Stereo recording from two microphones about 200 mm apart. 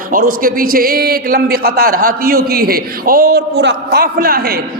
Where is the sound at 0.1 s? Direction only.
45° right (ahead or behind).